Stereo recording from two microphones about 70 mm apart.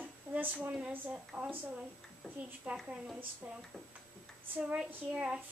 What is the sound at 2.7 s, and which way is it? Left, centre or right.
Speech, centre.